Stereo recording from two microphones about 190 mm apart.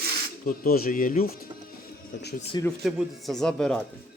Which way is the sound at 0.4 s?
50° left (ahead or behind).